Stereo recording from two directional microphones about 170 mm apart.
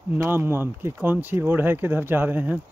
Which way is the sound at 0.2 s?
15° right (ahead or behind).